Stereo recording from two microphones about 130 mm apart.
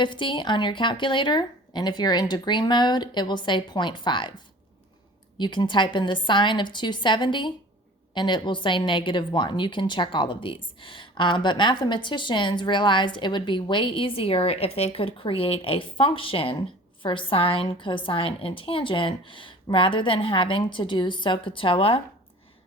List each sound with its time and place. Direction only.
0.0 s a woman's voice: 40° left (ahead or behind)
5.4 s a woman's voice: 35° left (ahead or behind)